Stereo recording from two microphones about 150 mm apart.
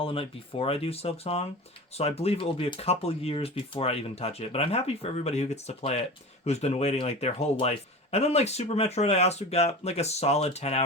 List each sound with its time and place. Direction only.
0.0 s speech: 40° left (ahead or behind)